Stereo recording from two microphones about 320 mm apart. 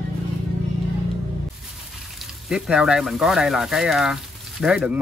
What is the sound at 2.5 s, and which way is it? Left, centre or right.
A man's voice, centre.